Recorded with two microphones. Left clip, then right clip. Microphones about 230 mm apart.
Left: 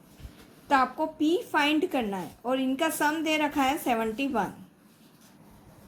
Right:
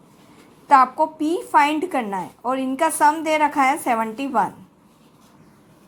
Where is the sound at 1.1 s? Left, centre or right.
Right.